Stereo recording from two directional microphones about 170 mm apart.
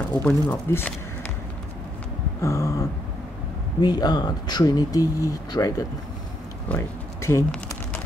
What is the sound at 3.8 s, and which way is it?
Speech, 25° left (ahead or behind).